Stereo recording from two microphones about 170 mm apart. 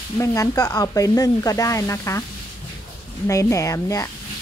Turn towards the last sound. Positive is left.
turn(degrees=20)  # may be behind; listen again after turning